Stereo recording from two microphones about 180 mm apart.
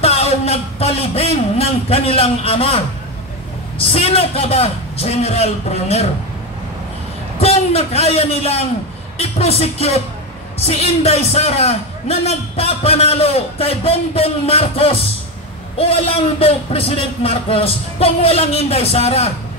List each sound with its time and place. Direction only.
0.0 s a man's voice: 35° left (ahead or behind)
7.3 s a man's voice: 35° left (ahead or behind)